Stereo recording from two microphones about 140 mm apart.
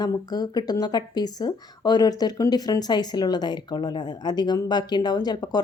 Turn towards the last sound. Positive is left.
turn(degrees=30)  # may be behind; listen again after turning